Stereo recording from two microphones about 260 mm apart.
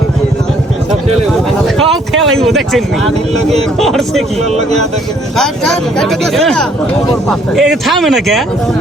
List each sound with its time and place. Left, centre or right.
2.3 s speech: centre
4.5 s speech: right
5.4 s speech: centre